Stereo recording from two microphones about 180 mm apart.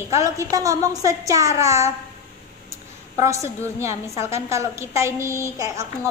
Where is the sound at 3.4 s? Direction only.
15° right (ahead or behind).